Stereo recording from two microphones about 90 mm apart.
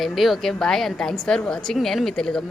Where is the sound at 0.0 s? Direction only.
Centre (ahead or behind).